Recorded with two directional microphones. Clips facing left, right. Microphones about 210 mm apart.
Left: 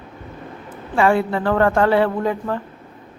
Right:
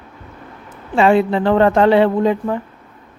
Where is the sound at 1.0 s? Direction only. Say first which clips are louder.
Right 4 dB; 20° right (ahead or behind).